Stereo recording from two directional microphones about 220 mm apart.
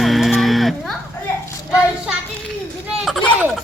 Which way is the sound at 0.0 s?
Centre (ahead or behind).